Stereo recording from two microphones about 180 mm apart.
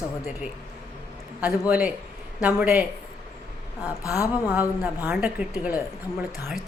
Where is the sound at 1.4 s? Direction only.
5° right (ahead or behind).